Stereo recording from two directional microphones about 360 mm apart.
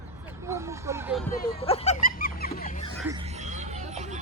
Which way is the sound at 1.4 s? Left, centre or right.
Centre.